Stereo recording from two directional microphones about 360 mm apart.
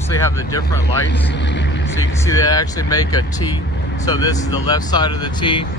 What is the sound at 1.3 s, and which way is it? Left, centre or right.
Speech, left.